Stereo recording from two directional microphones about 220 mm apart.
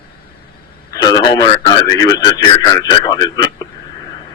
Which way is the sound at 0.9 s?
15° left (ahead or behind).